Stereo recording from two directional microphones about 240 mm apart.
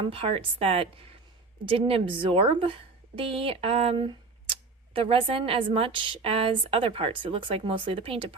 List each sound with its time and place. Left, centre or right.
0.0 s a woman's voice: right